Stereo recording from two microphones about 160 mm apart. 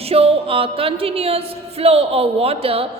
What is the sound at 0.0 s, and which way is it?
Music, 40° right (ahead or behind).